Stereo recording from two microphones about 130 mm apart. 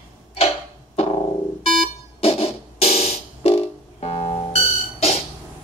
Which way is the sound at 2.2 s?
50° left (ahead or behind).